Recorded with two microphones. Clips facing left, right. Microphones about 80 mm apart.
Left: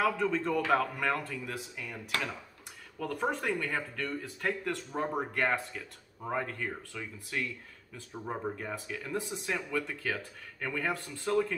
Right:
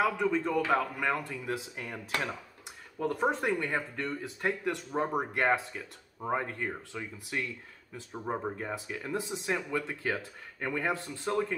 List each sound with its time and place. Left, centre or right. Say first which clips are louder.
0.0 s a man's voice: right 1 dB; centre
1.8 s speech: right 2 dB; right
3.0 s speech: right 3 dB; right